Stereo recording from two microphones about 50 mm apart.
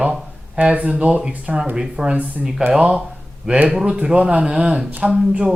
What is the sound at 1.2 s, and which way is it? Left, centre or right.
Speech, centre.